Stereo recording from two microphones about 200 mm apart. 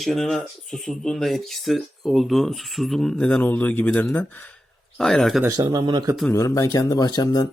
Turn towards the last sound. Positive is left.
turn(degrees=20)  # may be behind; listen again after turning